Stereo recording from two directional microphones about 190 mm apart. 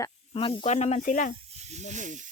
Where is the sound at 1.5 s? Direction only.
35° right (ahead or behind).